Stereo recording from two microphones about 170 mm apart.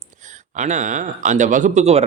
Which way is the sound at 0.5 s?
45° right (ahead or behind).